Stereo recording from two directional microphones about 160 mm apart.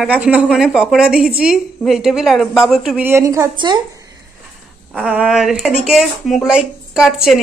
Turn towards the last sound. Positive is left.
turn(degrees=-5)  # may be behind; listen again after turning